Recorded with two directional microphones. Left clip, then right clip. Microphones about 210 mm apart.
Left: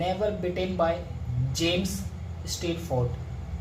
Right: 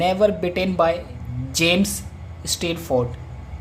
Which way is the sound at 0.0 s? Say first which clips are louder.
Right 9 dB; 45° right (ahead or behind).